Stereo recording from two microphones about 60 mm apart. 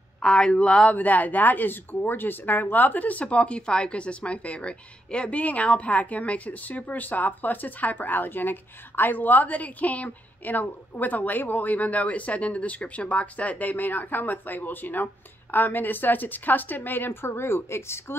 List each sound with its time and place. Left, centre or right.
0.2 s speech: centre
0.9 s a woman's voice: left